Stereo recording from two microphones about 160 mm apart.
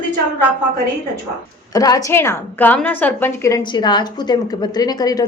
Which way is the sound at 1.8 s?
20° left (ahead or behind).